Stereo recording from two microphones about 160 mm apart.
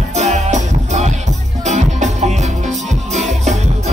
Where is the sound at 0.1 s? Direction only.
45° right (ahead or behind).